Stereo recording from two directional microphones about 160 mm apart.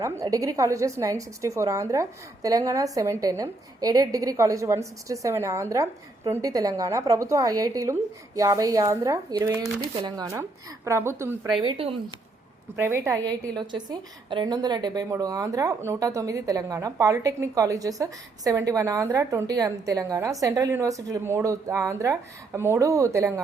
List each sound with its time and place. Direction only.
0.0 s a woman's voice: 20° right (ahead or behind)
11.6 s speech: 30° right (ahead or behind)
12.7 s a woman's voice: 15° right (ahead or behind)